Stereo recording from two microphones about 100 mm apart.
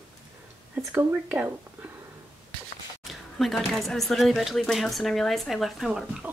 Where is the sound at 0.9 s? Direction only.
15° right (ahead or behind).